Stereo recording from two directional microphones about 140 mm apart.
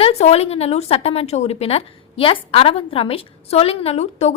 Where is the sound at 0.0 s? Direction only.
45° left (ahead or behind).